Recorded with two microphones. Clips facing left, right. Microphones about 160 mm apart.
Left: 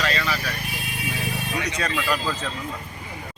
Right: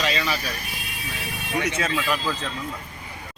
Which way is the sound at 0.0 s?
20° right (ahead or behind).